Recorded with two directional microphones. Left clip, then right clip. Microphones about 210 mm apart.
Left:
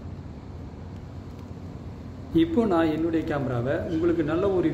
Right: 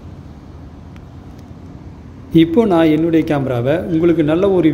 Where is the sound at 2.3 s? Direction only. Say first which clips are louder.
Right 10 dB; 25° right (ahead or behind).